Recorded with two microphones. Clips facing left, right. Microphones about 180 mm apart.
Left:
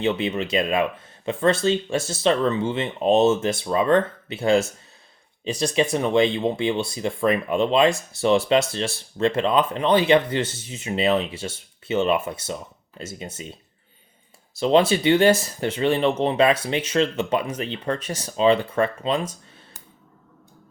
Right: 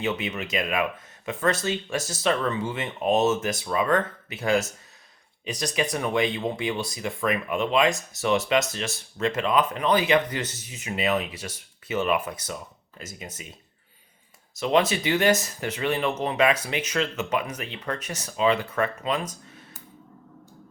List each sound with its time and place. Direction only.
0.0 s speech: 30° left (ahead or behind)